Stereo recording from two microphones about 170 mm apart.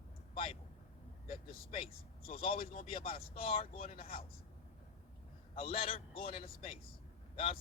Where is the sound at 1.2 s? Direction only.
60° left (ahead or behind).